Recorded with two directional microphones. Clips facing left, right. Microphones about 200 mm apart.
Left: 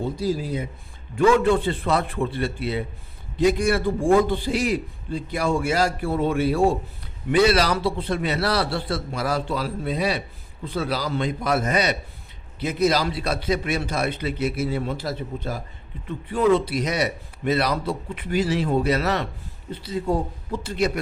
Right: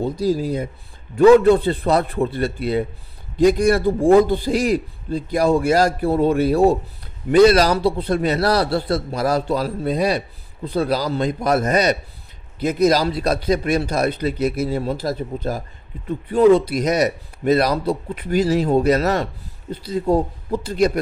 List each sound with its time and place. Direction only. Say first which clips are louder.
0.2 s a man's voice: right 7 dB; 40° right (ahead or behind)